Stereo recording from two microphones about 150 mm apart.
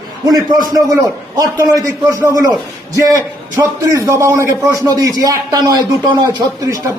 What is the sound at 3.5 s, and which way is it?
A man's voice, 20° right (ahead or behind).